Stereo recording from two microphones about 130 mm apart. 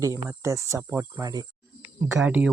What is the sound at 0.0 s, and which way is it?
Speech, 25° right (ahead or behind).